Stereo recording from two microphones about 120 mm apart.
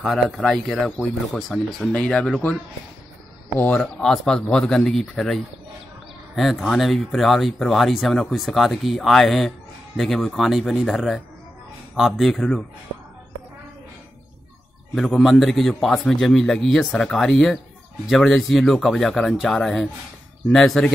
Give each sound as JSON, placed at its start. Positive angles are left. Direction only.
{"t": 0.0, "sound": "speech", "side_deg": 0}
{"t": 3.5, "sound": "speech", "side_deg": 15}
{"t": 3.8, "sound": "speech", "side_deg": 5}
{"t": 15.0, "sound": "speech", "side_deg": 0}